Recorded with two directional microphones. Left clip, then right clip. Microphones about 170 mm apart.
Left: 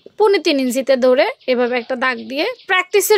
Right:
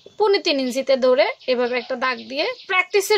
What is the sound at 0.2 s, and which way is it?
A woman's voice, 40° left (ahead or behind).